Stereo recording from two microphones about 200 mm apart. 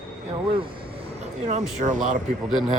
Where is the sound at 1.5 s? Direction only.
40° right (ahead or behind).